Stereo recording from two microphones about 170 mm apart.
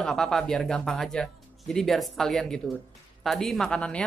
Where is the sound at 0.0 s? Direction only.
5° left (ahead or behind).